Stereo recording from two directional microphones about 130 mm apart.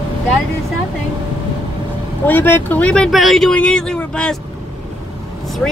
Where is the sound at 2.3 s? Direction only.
15° left (ahead or behind).